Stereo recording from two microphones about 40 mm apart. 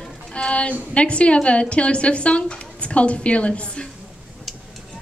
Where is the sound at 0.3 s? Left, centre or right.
Left.